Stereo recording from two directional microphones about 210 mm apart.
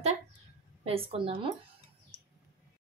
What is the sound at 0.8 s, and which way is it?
Speech, 25° right (ahead or behind).